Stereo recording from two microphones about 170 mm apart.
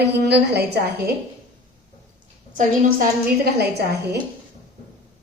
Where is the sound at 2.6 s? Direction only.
55° right (ahead or behind).